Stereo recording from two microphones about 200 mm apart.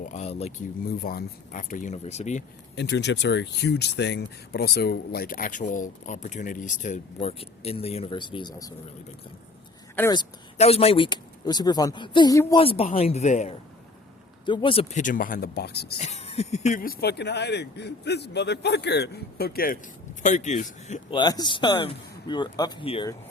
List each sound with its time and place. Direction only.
0.0 s speech: 35° left (ahead or behind)
0.9 s speech: 50° left (ahead or behind)
2.7 s speech: 60° left (ahead or behind); by 8.7 s 20° left (ahead or behind)
9.9 s speech: 10° left (ahead or behind)
10.2 s speech: 30° left (ahead or behind)
12.5 s speech: 30° left (ahead or behind)
14.4 s speech: 25° left (ahead or behind); by 16.0 s 55° left (ahead or behind)
16.0 s speech: 30° left (ahead or behind)
21.1 s speech: 20° left (ahead or behind)